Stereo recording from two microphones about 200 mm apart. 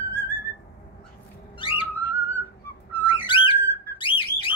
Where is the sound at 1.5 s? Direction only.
25° left (ahead or behind).